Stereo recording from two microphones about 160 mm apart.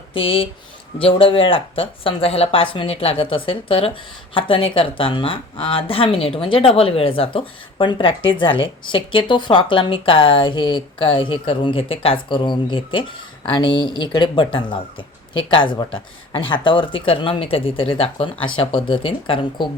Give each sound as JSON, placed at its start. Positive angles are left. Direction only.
{"t": 0.1, "sound": "speech", "side_deg": 35}